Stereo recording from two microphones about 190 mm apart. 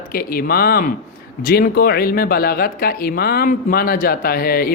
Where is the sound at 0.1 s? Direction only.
50° left (ahead or behind).